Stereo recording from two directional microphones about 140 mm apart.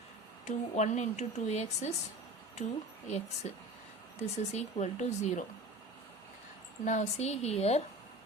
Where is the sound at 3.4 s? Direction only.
55° left (ahead or behind).